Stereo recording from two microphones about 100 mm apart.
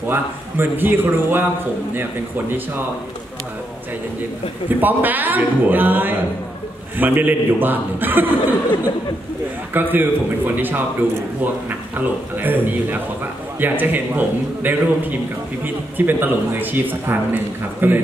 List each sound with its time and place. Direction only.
0.1 s a man's voice: 20° right (ahead or behind)
4.6 s a man's voice: 20° right (ahead or behind)
9.8 s a man's voice: 20° right (ahead or behind)
12.0 s a man's voice: 20° right (ahead or behind)